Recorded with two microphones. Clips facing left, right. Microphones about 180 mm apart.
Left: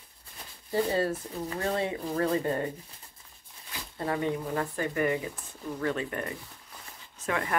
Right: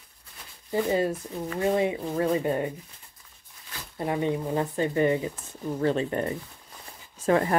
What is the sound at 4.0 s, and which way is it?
Speech, 20° right (ahead or behind).